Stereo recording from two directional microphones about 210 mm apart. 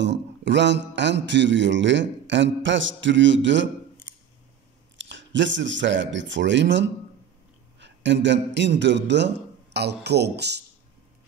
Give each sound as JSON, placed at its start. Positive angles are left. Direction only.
{"t": 0.0, "sound": "a man's voice", "side_deg": -55}
{"t": 4.9, "sound": "a man's voice", "side_deg": -60}